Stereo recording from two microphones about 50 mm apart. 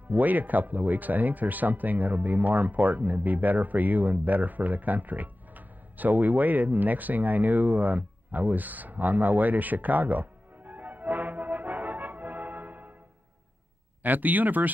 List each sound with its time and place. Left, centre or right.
0.1 s speech: right
14.0 s speech: right